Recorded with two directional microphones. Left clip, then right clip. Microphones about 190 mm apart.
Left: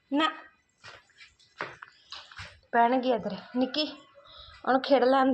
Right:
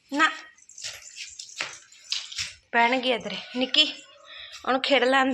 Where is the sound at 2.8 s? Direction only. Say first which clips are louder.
Right 2 dB; centre (ahead or behind).